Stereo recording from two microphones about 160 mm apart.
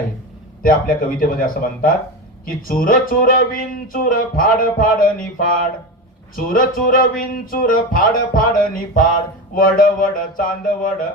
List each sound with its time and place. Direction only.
0.6 s speech: 60° left (ahead or behind)
6.3 s speech: 60° left (ahead or behind)